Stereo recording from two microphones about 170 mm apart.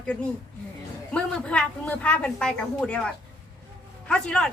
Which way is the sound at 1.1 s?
5° left (ahead or behind).